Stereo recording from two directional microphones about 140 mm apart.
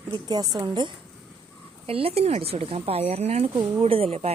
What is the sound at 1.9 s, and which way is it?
Speech, 45° right (ahead or behind).